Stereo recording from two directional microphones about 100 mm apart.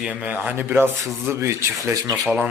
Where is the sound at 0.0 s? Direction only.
10° right (ahead or behind); by 2.1 s 30° right (ahead or behind).